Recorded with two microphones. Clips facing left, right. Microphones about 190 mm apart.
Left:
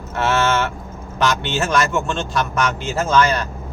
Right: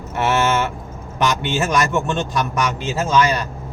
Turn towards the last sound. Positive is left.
turn(degrees=-15)  # may be behind; listen again after turning